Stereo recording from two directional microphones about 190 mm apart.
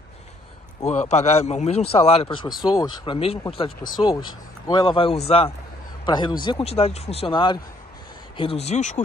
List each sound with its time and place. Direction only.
0.8 s speech: 35° left (ahead or behind)